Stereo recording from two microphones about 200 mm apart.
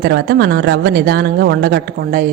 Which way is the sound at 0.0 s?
55° right (ahead or behind).